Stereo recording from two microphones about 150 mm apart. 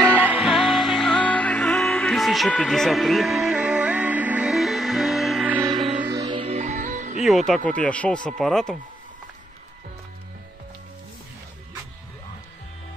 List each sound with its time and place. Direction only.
0.1 s music: 10° right (ahead or behind)
5.9 s music: 15° right (ahead or behind)
6.4 s music: 50° right (ahead or behind)
7.2 s speech: centre (ahead or behind)